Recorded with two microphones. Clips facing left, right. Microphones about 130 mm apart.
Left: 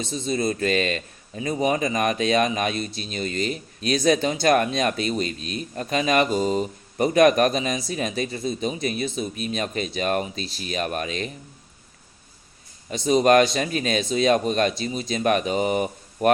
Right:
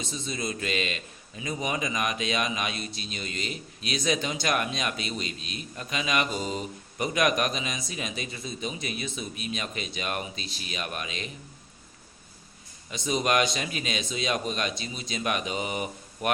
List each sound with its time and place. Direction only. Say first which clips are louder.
0.0 s a man's voice: left 8 dB; 40° left (ahead or behind)
12.9 s a man's voice: left 9 dB; 40° left (ahead or behind)